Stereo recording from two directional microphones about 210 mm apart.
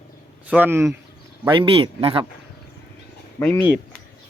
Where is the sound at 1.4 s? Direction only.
25° right (ahead or behind).